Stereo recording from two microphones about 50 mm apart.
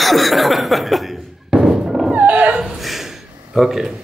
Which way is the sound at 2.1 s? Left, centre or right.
Right.